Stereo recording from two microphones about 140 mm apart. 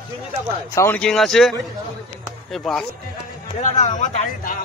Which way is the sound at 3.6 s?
60° left (ahead or behind).